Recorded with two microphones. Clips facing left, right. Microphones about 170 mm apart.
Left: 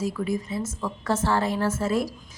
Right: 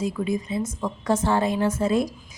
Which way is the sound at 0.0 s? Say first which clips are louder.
Right 1 dB; 20° right (ahead or behind).